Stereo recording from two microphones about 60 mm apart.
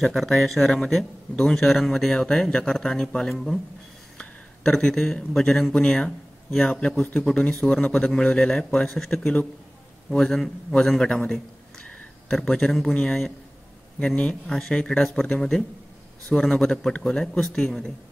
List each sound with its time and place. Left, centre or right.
0.0 s speech: centre
7.0 s a man's voice: left
7.5 s speech: centre
7.8 s a man's voice: left
10.1 s speech: centre
11.8 s a sound: centre
12.9 s speech: centre